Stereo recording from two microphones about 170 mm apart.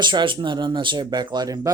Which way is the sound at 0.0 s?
30° right (ahead or behind).